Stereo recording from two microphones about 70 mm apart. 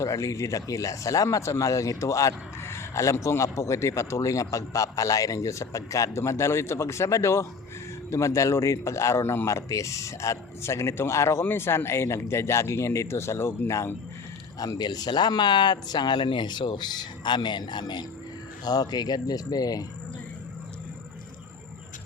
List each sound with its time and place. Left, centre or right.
0.0 s speech: left
2.6 s a sound: left
3.2 s speech: left
14.6 s speech: left
18.6 s speech: left